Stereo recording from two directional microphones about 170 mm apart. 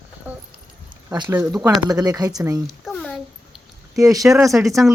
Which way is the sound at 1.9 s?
20° right (ahead or behind).